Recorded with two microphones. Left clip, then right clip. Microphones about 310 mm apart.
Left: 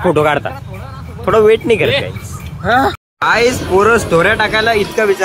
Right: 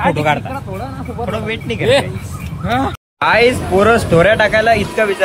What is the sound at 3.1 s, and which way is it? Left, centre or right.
Speech, centre.